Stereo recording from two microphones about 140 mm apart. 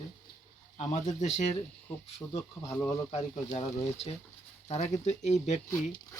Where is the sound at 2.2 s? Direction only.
20° left (ahead or behind).